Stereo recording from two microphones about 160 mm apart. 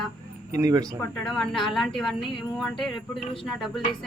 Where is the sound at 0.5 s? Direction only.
20° right (ahead or behind).